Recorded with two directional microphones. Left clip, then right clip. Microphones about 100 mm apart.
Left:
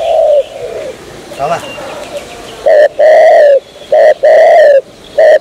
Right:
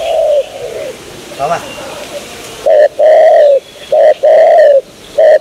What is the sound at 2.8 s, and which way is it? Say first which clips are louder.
Bird: left 1 dB; 10° left (ahead or behind).